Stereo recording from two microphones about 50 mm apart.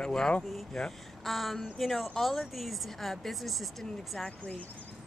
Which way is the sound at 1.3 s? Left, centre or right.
Centre.